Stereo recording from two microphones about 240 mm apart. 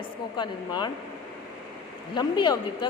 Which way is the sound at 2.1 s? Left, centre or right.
Centre.